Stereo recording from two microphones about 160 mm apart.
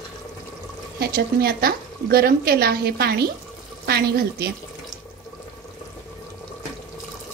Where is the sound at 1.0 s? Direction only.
75° right (ahead or behind).